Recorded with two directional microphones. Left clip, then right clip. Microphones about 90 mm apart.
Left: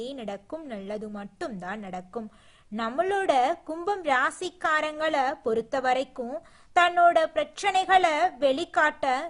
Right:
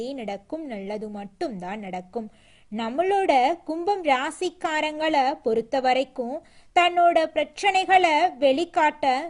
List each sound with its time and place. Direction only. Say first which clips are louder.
0.0 s a woman's voice: right 4 dB; 25° right (ahead or behind)